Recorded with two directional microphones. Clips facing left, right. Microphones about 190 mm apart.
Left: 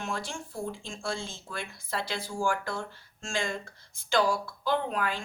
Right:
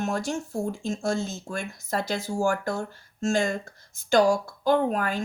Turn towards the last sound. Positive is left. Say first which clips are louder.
# right 6 dB
turn(degrees=-45)  # may be behind; listen again after turning